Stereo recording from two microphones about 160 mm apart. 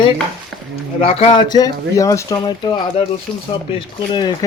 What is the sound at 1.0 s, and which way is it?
Speech, 40° left (ahead or behind).